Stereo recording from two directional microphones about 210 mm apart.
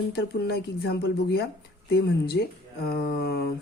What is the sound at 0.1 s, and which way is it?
Speech, 50° left (ahead or behind).